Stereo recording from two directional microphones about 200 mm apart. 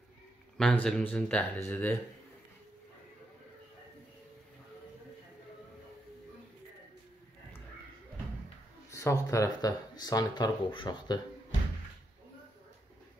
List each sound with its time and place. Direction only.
0.6 s speech: 5° left (ahead or behind)
8.9 s speech: 15° left (ahead or behind)